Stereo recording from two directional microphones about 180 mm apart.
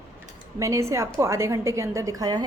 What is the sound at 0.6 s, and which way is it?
A woman's voice, 15° right (ahead or behind).